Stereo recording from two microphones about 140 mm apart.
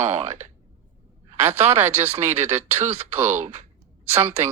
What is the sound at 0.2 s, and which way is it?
Speech, 55° right (ahead or behind).